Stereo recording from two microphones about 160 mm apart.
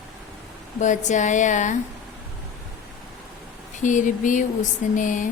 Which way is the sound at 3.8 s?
50° left (ahead or behind).